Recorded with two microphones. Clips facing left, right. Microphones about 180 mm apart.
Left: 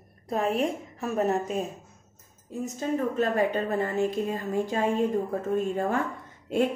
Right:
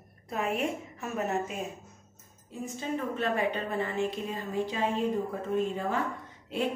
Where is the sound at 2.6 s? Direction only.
45° left (ahead or behind).